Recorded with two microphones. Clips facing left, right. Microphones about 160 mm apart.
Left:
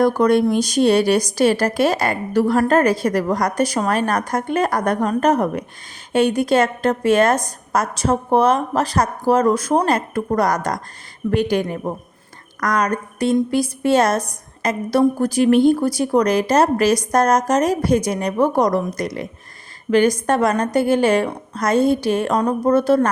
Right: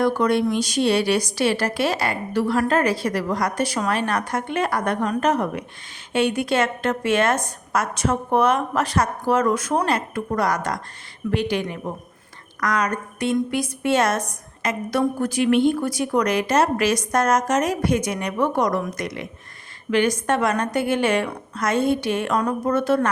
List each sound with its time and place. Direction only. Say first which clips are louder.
0.0 s a woman's voice: left 4 dB; 45° left (ahead or behind)